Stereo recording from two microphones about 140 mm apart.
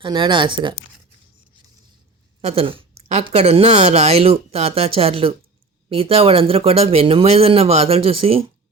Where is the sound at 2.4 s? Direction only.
45° right (ahead or behind).